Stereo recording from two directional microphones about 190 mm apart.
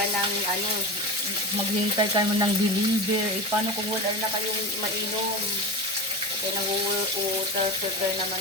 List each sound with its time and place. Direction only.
2.0 s frying: 20° right (ahead or behind)